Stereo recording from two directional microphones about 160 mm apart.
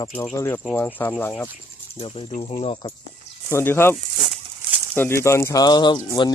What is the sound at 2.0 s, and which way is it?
Speech, 30° left (ahead or behind).